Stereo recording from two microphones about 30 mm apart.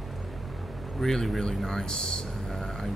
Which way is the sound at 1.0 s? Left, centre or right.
Centre.